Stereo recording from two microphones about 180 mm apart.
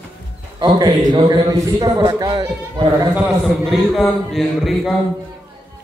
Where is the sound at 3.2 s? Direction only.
Centre (ahead or behind).